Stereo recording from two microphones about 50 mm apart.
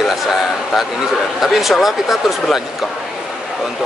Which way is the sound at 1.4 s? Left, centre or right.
Centre.